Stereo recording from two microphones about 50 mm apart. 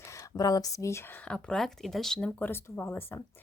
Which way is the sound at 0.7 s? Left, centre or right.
Left.